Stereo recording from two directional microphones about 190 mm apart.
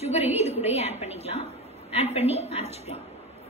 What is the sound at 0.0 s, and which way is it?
A woman's voice, 35° left (ahead or behind).